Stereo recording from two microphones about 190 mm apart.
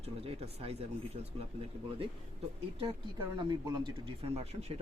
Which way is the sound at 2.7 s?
25° right (ahead or behind).